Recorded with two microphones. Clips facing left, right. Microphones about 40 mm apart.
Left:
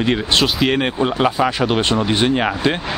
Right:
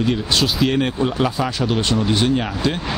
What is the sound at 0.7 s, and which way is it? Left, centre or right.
Speech, left.